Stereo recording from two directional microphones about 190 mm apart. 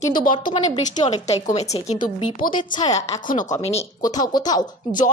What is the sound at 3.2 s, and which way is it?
Speech, 45° left (ahead or behind).